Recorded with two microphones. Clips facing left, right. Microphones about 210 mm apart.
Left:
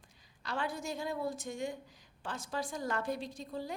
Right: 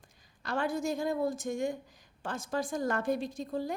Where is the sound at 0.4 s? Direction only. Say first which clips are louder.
Right 6 dB; 45° right (ahead or behind).